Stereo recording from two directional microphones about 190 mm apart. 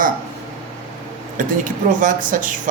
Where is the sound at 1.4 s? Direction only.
45° right (ahead or behind).